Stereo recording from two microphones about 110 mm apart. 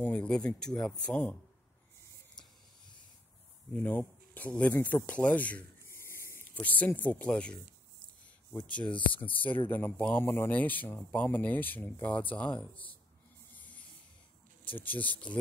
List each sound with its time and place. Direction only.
0.0 s speech: 10° left (ahead or behind)
3.7 s speech: 15° left (ahead or behind)
4.7 s rub: 20° left (ahead or behind)
7.0 s speech: 15° left (ahead or behind)
8.5 s speech: 10° left (ahead or behind)
14.8 s speech: 15° left (ahead or behind)